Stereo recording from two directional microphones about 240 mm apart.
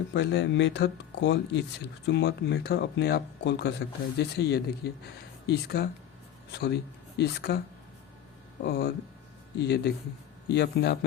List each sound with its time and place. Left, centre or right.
0.1 s speech: left
8.6 s speech: left